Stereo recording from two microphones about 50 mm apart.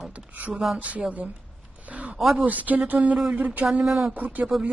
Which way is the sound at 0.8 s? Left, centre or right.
Right.